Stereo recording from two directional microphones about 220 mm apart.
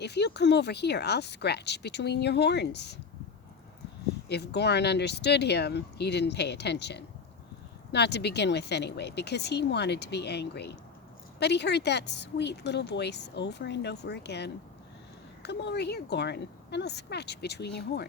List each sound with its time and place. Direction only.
0.0 s speech: 50° left (ahead or behind)
4.3 s speech: 50° left (ahead or behind)